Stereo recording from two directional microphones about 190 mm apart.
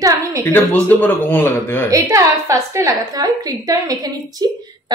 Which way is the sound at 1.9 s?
15° right (ahead or behind).